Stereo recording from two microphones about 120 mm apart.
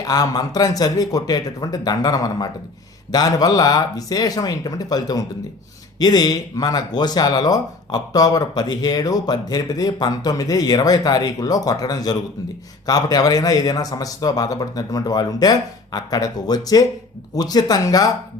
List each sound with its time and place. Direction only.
0.0 s speech: 35° left (ahead or behind)